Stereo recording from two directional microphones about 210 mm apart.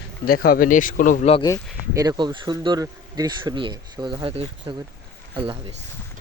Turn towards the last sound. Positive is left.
turn(degrees=-25)  # may be behind; listen again after turning